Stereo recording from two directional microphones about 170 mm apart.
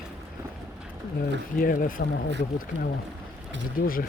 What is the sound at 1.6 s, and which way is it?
Speech, 55° left (ahead or behind).